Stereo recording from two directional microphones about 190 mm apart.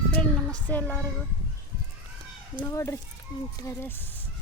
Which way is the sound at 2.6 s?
15° left (ahead or behind).